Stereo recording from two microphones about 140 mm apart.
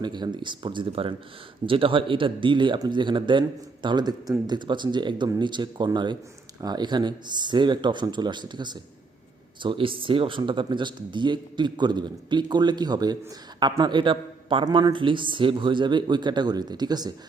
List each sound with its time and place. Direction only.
0.0 s a man's voice: 30° right (ahead or behind)